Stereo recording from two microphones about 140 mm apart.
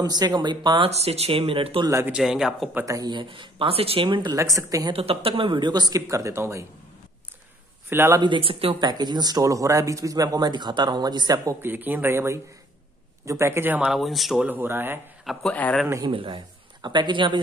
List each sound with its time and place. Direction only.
0.0 s speech: 30° right (ahead or behind)
0.8 s speech: 50° right (ahead or behind)
1.9 s speech: 20° right (ahead or behind)
2.1 s a man's voice: 5° right (ahead or behind)
2.8 s speech: 25° right (ahead or behind)
4.4 s speech: 20° right (ahead or behind)
4.9 s speech: 40° right (ahead or behind); by 6.6 s 20° right (ahead or behind)
7.9 s speech: 15° right (ahead or behind)
8.2 s speech: 40° right (ahead or behind)
8.9 s speech: 30° right (ahead or behind)
11.6 s speech: 15° right (ahead or behind)
14.5 s speech: 15° right (ahead or behind)
15.2 s a man's voice: 10° left (ahead or behind)
16.1 s speech: 35° right (ahead or behind)